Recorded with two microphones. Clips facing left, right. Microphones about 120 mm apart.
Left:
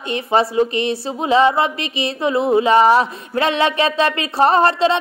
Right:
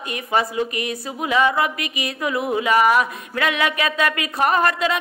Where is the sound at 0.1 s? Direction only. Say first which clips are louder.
Left 5 dB; 30° left (ahead or behind).